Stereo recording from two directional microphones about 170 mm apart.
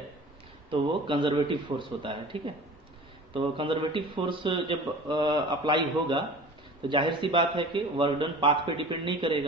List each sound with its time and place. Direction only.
0.7 s speech: 30° right (ahead or behind)